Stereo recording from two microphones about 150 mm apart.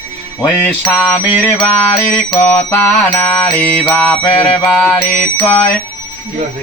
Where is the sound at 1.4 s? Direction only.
10° left (ahead or behind).